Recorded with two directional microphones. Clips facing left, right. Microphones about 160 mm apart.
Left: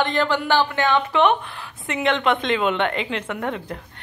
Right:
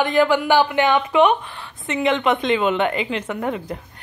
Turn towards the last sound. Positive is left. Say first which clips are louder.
# right 2 dB
turn(degrees=-5)  # may be behind; listen again after turning